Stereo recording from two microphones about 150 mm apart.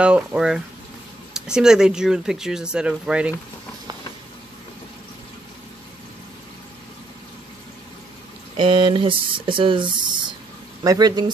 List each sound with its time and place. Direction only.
0.0 s speech: 5° right (ahead or behind)
8.5 s speech: 35° right (ahead or behind)